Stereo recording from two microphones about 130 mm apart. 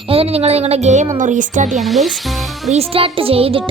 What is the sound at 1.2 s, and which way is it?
Speech, 75° right (ahead or behind).